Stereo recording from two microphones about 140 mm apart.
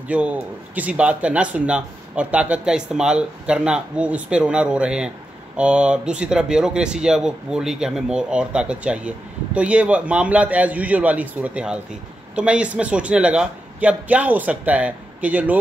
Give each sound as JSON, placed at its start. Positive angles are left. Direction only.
{"t": 0.1, "sound": "speech", "side_deg": -10}